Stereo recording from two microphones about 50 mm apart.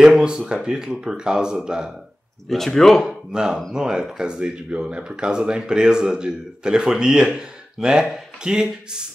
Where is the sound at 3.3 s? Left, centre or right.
Centre.